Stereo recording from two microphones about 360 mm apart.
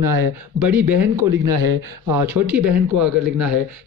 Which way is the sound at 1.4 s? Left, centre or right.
Right.